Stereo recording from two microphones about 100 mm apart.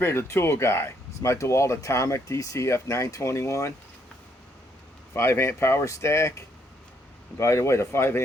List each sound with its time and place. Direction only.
0.0 s speech: 25° left (ahead or behind)
5.1 s speech: 25° left (ahead or behind)
7.3 s speech: 30° left (ahead or behind)